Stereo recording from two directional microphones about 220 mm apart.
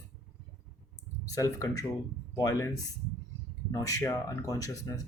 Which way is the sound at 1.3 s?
15° left (ahead or behind).